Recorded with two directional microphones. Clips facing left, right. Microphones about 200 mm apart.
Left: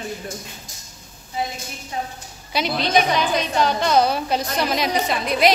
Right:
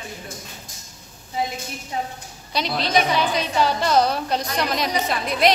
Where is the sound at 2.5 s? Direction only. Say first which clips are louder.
Left 2 dB; 5° left (ahead or behind).